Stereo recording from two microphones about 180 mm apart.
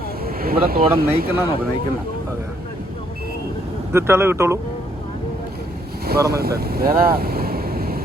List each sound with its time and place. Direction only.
0.3 s speech: 55° right (ahead or behind)
3.9 s speech: 15° right (ahead or behind)
6.1 s speech: 60° right (ahead or behind)